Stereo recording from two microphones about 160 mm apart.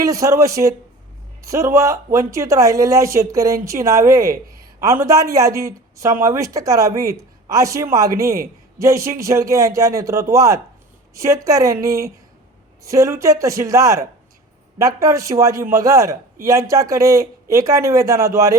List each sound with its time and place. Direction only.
0.0 s a man's voice: 20° right (ahead or behind)